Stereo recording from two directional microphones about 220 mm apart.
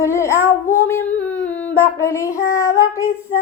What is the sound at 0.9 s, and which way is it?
Speech, 5° left (ahead or behind).